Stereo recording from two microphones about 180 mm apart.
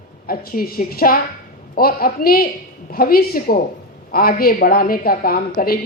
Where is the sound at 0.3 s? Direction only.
55° left (ahead or behind).